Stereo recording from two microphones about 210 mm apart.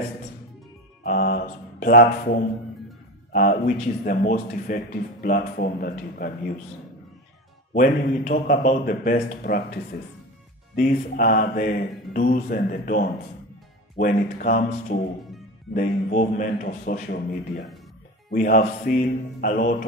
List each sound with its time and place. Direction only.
1.0 s mantra: 45° left (ahead or behind)
3.3 s a man's voice: 40° left (ahead or behind)
7.7 s a man's voice: 40° left (ahead or behind)
10.8 s a man's voice: 40° left (ahead or behind)